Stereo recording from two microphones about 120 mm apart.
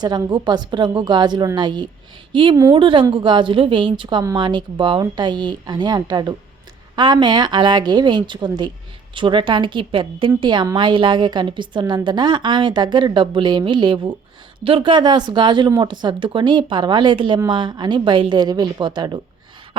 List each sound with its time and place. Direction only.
0.0 s a woman's voice: 40° right (ahead or behind)